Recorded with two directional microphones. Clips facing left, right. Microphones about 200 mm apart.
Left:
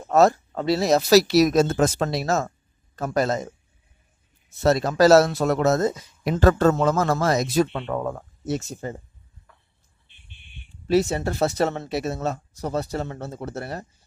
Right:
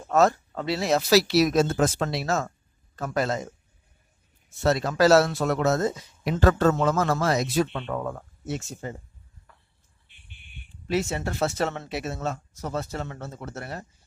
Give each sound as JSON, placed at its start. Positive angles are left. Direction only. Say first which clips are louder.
{"t": 0.1, "sound": "speech", "louder": "left 3 dB", "side_deg": 35}
{"t": 4.6, "sound": "speech", "louder": "left 3 dB", "side_deg": 40}
{"t": 10.9, "sound": "speech", "louder": "left 6 dB", "side_deg": 35}